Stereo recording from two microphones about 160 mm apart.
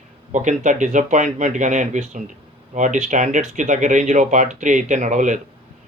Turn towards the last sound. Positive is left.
turn(degrees=-50)  # may be behind; listen again after turning